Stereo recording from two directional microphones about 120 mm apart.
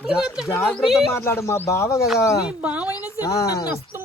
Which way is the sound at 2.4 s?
10° right (ahead or behind).